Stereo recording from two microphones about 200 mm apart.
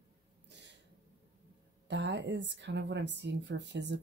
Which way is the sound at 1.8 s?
60° right (ahead or behind).